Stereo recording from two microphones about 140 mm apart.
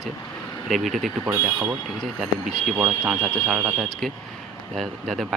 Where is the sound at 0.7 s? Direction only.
Centre (ahead or behind).